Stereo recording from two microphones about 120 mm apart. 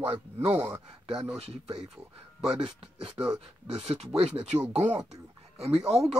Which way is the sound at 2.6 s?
50° right (ahead or behind).